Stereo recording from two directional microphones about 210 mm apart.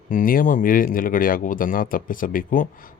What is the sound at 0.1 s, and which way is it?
Speech, 40° left (ahead or behind).